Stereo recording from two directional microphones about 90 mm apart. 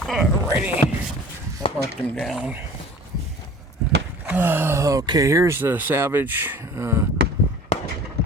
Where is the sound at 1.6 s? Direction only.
90° left.